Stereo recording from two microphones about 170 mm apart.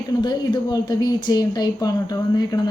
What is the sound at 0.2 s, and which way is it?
Speech, 25° left (ahead or behind).